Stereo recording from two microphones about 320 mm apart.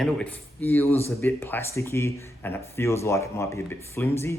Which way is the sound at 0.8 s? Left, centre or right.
Centre.